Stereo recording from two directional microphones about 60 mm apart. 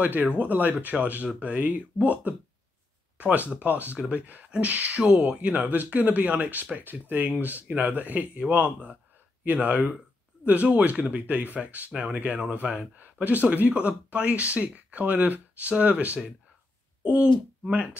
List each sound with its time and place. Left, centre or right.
0.0 s speech: right